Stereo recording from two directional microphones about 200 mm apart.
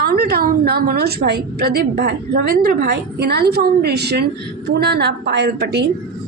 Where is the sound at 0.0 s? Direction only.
50° right (ahead or behind).